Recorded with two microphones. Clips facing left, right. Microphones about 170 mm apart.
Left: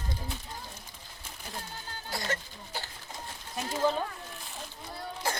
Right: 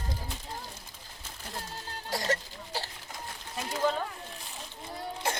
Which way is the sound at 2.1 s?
35° right (ahead or behind).